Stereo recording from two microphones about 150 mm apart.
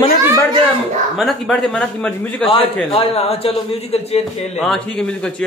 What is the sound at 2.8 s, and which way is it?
A man's voice, 40° left (ahead or behind).